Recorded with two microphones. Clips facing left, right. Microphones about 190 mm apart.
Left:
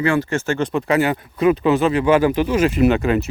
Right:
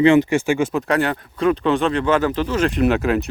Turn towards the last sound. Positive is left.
turn(degrees=0)  # may be behind; listen again after turning